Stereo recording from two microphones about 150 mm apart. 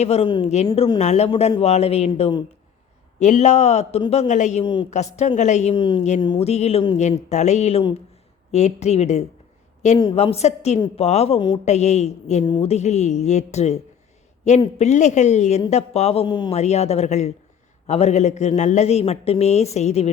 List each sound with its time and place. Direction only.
0.0 s speech: 45° left (ahead or behind)
4.6 s a woman's voice: 30° left (ahead or behind)
4.9 s speech: 50° left (ahead or behind)
5.7 s a woman's voice: 30° left (ahead or behind)
6.0 s speech: 50° left (ahead or behind)
6.2 s a woman's voice: 35° left (ahead or behind)
6.5 s a woman's voice: 45° left (ahead or behind)
11.6 s speech: 50° left (ahead or behind)
14.8 s speech: 50° left (ahead or behind)
16.2 s a woman's voice: 30° left (ahead or behind)
16.6 s speech: 45° left (ahead or behind)